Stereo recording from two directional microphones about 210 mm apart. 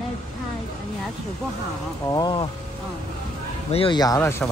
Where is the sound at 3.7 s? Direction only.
20° left (ahead or behind).